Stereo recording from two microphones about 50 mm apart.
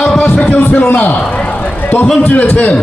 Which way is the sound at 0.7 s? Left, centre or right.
Left.